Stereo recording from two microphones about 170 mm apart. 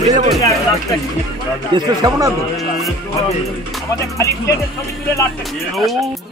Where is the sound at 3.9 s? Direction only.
20° left (ahead or behind).